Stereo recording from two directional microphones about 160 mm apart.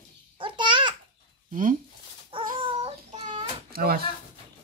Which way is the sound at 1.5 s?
55° right (ahead or behind).